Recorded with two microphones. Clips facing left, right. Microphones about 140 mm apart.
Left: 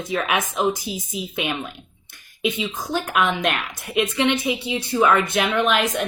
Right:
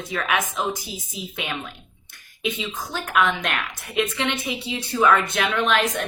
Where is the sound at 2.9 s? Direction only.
15° left (ahead or behind).